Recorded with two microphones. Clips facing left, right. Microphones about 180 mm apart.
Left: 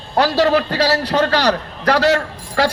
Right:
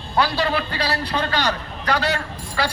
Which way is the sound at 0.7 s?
75° left (ahead or behind).